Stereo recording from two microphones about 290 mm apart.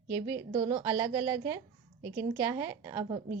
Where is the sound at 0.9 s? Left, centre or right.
Centre.